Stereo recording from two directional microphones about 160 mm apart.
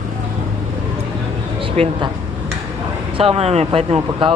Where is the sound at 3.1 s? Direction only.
35° right (ahead or behind).